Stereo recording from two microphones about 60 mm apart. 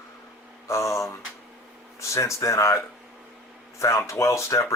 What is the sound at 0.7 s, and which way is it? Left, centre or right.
Speech, left.